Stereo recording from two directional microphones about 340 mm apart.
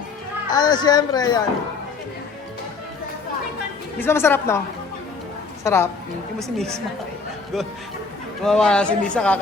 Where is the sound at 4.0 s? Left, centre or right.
Centre.